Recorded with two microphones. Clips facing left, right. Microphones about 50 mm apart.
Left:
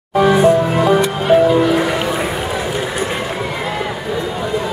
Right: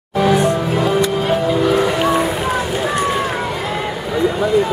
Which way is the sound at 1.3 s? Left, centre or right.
Centre.